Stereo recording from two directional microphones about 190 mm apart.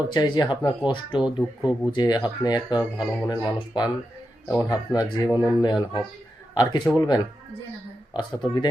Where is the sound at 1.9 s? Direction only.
25° left (ahead or behind).